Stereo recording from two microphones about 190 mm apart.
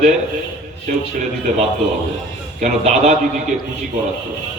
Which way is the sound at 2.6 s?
40° right (ahead or behind).